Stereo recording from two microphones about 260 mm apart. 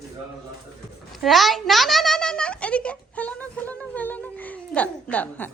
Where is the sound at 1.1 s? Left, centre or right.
Centre.